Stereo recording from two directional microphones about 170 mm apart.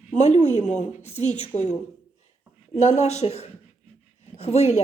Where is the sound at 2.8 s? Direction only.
40° left (ahead or behind).